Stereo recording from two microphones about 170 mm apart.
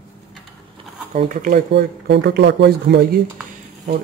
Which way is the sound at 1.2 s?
50° right (ahead or behind).